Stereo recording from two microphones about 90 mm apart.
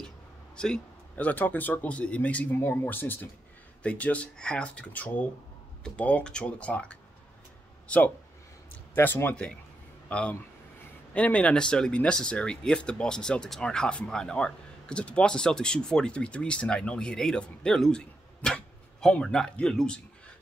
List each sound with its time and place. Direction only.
0.6 s speech: 10° left (ahead or behind)
2.5 s speech: 25° left (ahead or behind); by 20.0 s 5° left (ahead or behind)